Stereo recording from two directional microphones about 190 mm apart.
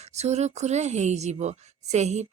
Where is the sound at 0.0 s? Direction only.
35° right (ahead or behind).